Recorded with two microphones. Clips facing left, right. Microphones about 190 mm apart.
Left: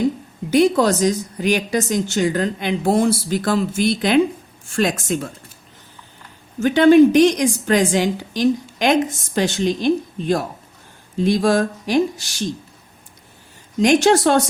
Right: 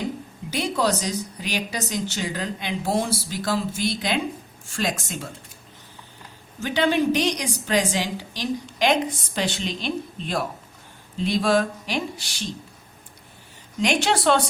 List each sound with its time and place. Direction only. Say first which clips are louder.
0.5 s a woman's voice: left 9 dB; 50° left (ahead or behind)
6.6 s a woman's voice: left 11 dB; 50° left (ahead or behind)
13.8 s a woman's voice: left 7 dB; 45° left (ahead or behind)